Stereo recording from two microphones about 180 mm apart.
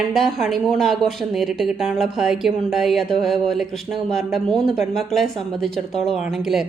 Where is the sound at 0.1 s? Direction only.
Centre (ahead or behind).